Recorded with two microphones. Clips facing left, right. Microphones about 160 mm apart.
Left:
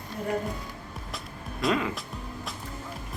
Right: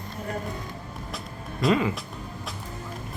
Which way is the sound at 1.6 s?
Centre (ahead or behind).